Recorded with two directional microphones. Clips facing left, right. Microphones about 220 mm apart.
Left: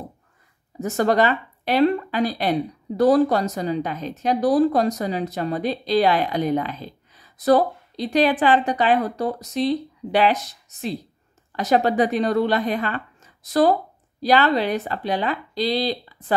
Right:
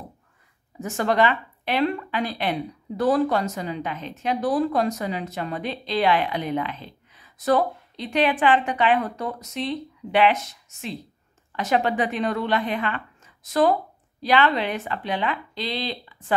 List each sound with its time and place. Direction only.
0.7 s speech: 40° left (ahead or behind)